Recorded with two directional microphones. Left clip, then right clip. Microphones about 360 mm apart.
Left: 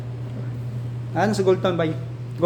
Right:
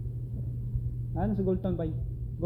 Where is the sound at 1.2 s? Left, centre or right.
Centre.